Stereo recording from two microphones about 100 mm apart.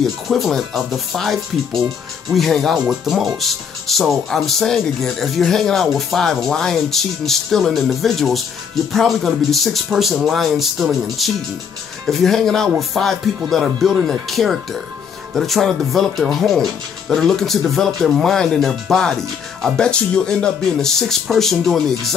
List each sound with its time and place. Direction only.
0.0 s speech: centre (ahead or behind)